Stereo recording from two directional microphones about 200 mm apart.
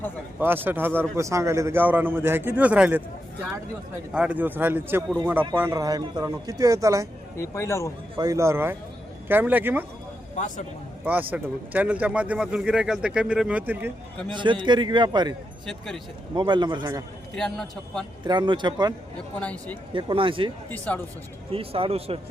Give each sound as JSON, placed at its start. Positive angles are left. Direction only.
{"t": 0.3, "sound": "speech", "side_deg": -10}
{"t": 4.1, "sound": "speech", "side_deg": -5}
{"t": 7.3, "sound": "speech", "side_deg": 15}
{"t": 8.1, "sound": "speech", "side_deg": -20}
{"t": 10.3, "sound": "speech", "side_deg": 40}
{"t": 11.0, "sound": "speech", "side_deg": -10}
{"t": 14.3, "sound": "a man's voice", "side_deg": -25}
{"t": 17.3, "sound": "a man's voice", "side_deg": 5}
{"t": 18.3, "sound": "a man's voice", "side_deg": -20}
{"t": 19.4, "sound": "speech", "side_deg": 5}
{"t": 19.9, "sound": "a man's voice", "side_deg": -25}
{"t": 20.7, "sound": "speech", "side_deg": 10}
{"t": 21.5, "sound": "a man's voice", "side_deg": -30}